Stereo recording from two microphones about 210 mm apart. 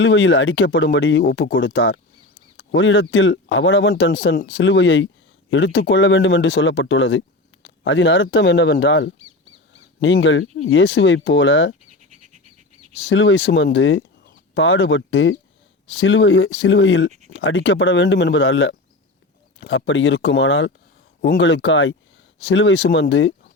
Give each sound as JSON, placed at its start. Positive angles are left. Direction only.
{"t": 0.0, "sound": "speech", "side_deg": 65}
{"t": 13.0, "sound": "speech", "side_deg": 60}